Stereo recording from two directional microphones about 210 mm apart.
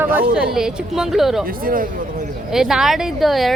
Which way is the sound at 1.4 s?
40° right (ahead or behind).